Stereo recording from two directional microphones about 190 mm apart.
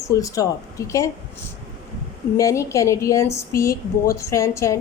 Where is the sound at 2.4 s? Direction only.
15° left (ahead or behind).